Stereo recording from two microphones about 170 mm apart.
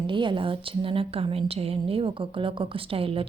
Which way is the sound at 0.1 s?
30° right (ahead or behind).